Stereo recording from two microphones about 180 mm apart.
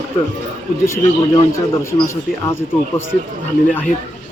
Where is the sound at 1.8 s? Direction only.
20° left (ahead or behind).